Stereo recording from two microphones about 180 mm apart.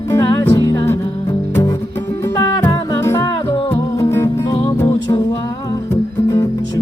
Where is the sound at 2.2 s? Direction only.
15° left (ahead or behind).